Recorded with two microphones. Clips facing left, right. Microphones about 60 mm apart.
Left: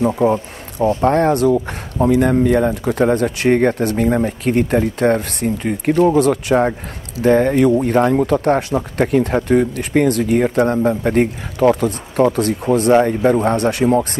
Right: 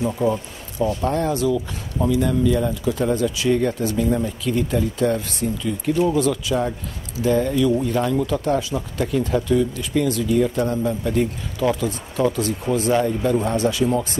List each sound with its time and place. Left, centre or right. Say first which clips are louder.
0.0 s speech: left 6 dB; left